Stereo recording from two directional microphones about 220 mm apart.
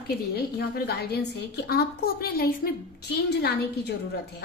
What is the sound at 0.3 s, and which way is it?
Speech, 45° left (ahead or behind).